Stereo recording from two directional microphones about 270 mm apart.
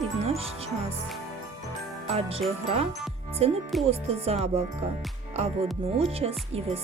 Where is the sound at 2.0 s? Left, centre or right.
Right.